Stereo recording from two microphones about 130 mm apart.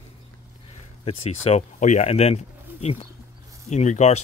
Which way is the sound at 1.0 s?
55° left (ahead or behind).